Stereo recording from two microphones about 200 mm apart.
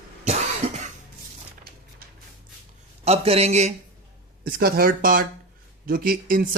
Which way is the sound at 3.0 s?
30° right (ahead or behind).